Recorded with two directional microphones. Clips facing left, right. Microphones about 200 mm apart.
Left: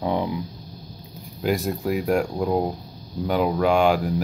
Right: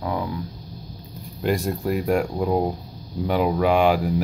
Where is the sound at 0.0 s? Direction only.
20° left (ahead or behind).